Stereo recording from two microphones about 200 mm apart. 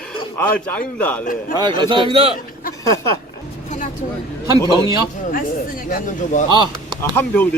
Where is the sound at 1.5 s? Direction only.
25° right (ahead or behind).